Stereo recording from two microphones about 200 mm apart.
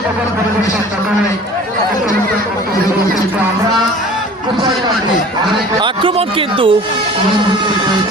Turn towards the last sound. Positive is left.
turn(degrees=-25)  # may be behind; listen again after turning